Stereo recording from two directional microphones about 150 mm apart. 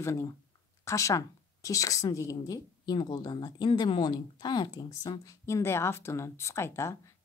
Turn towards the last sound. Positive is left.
turn(degrees=20)  # may be behind; listen again after turning